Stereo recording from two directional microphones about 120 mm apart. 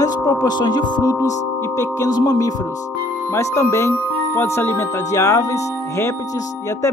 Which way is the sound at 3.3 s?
25° left (ahead or behind).